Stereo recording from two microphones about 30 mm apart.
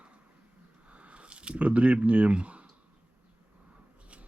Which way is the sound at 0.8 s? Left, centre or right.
Right.